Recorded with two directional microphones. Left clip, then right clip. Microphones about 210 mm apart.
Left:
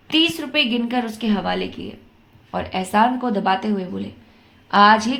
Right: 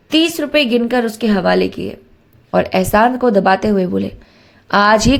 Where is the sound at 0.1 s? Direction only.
25° right (ahead or behind).